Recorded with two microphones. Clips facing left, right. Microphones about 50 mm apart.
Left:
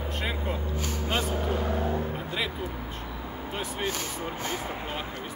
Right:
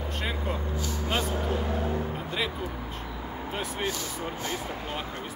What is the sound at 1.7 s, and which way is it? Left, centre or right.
Vehicle, centre.